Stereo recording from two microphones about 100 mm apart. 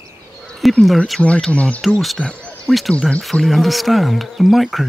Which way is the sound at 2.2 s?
10° left (ahead or behind).